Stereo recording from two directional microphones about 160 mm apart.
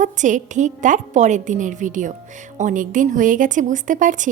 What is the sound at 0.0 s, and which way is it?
A woman's voice, 50° right (ahead or behind).